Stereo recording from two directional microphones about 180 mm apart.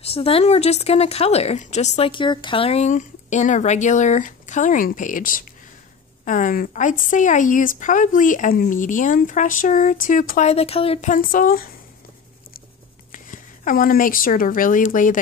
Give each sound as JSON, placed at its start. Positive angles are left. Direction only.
{"t": 0.0, "sound": "speech", "side_deg": 35}
{"t": 11.1, "sound": "speech", "side_deg": 50}
{"t": 13.1, "sound": "speech", "side_deg": 50}